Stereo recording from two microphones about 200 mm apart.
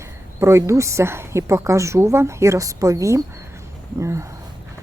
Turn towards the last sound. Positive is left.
turn(degrees=-15)  # may be behind; listen again after turning